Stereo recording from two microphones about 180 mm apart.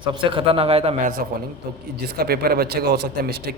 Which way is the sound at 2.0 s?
60° right (ahead or behind).